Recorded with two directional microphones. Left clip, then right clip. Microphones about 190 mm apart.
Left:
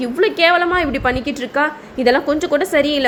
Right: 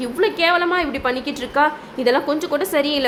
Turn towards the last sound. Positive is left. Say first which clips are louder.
# left 3 dB
turn(degrees=15)  # may be behind; listen again after turning